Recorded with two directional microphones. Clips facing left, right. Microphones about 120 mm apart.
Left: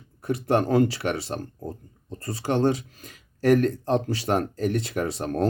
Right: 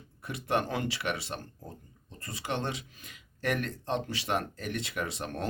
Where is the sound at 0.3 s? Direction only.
40° left (ahead or behind).